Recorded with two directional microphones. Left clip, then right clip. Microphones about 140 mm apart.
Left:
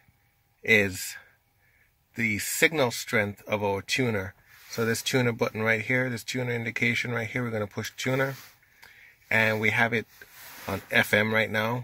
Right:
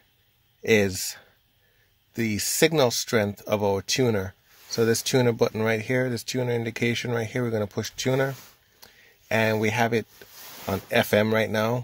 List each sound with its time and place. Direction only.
0.6 s speech: 40° right (ahead or behind)